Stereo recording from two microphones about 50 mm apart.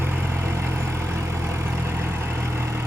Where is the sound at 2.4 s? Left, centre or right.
Right.